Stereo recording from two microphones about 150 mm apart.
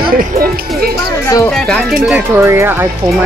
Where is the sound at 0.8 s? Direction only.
90° right.